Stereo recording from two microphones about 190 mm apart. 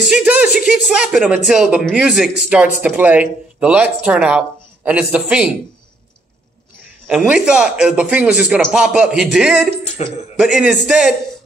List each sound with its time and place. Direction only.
0.1 s a man's voice: 5° right (ahead or behind)
7.1 s a man's voice: 5° right (ahead or behind)
10.0 s speech: 35° left (ahead or behind)
10.3 s a man's voice: 5° right (ahead or behind)